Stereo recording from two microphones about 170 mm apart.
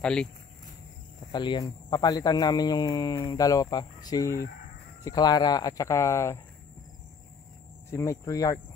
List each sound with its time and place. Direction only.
0.0 s speech: 5° left (ahead or behind)
1.3 s speech: 25° left (ahead or behind)
7.9 s speech: 15° left (ahead or behind)